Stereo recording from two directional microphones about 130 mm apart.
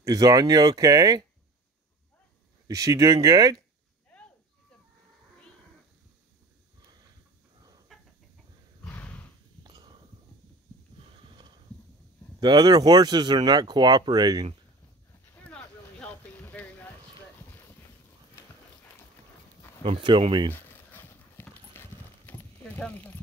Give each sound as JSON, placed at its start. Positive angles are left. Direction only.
{"t": 0.0, "sound": "speech", "side_deg": -30}
{"t": 2.7, "sound": "speech", "side_deg": -25}
{"t": 7.9, "sound": "chicken", "side_deg": 0}
{"t": 8.8, "sound": "horse", "side_deg": 10}
{"t": 9.6, "sound": "a sound", "side_deg": -35}
{"t": 12.4, "sound": "speech", "side_deg": -30}
{"t": 15.3, "sound": "a sound", "side_deg": 10}
{"t": 19.8, "sound": "speech", "side_deg": -45}
{"t": 20.5, "sound": "clip-clop", "side_deg": 15}